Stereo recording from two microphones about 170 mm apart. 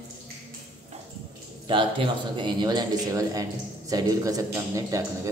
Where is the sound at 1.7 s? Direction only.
30° right (ahead or behind).